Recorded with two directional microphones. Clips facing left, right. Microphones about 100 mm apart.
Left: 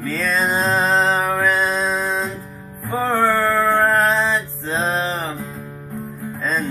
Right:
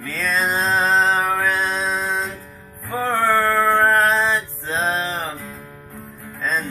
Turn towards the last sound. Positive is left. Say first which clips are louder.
# left 2 dB
turn(degrees=5)  # may be behind; listen again after turning